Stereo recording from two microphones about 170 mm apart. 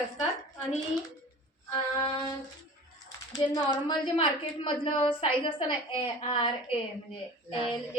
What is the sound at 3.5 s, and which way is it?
A woman's voice, 25° left (ahead or behind).